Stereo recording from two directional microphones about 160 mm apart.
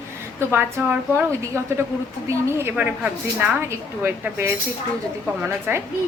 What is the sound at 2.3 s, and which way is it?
A woman's voice, 10° right (ahead or behind).